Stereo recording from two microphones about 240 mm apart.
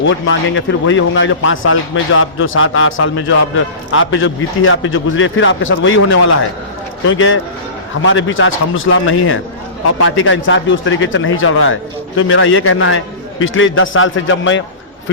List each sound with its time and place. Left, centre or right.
0.0 s a man's voice: left